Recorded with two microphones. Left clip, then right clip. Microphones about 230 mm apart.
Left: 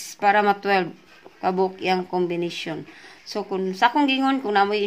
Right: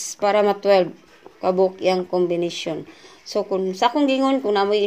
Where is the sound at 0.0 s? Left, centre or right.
Centre.